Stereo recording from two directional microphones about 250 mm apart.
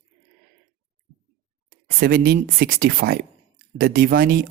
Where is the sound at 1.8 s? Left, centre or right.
Right.